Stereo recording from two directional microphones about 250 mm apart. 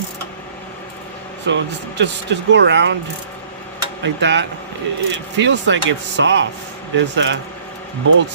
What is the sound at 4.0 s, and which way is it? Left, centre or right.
Speech, right.